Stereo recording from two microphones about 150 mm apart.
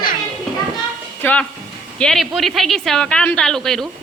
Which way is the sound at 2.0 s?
Centre (ahead or behind).